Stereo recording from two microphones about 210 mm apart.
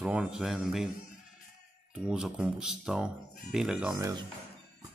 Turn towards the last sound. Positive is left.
turn(degrees=-5)  # may be behind; listen again after turning